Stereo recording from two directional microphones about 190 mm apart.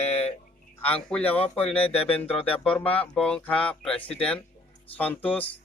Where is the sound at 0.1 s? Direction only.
35° left (ahead or behind).